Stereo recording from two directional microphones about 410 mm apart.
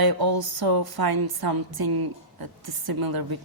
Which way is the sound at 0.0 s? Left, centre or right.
Right.